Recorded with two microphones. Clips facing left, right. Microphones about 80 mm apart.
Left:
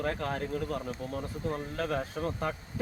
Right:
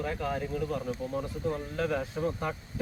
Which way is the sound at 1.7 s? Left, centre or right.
Left.